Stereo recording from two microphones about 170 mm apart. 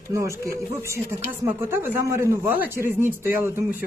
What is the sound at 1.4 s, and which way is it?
Speech, 15° right (ahead or behind).